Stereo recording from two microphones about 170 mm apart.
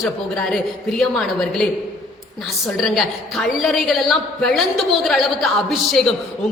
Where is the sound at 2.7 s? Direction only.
Centre (ahead or behind).